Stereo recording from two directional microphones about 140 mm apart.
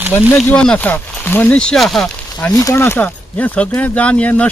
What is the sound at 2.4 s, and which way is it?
Speech, 10° left (ahead or behind).